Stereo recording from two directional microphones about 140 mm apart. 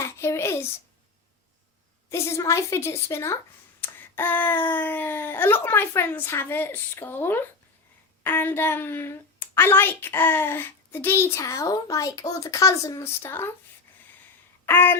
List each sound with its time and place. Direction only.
0.0 s a sound: 20° left (ahead or behind)
2.0 s a woman's voice: 20° left (ahead or behind)
14.7 s a woman's voice: 15° left (ahead or behind)